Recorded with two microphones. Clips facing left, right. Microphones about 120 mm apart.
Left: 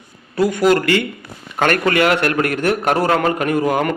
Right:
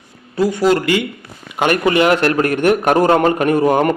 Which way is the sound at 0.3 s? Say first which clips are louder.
Even; 25° right (ahead or behind).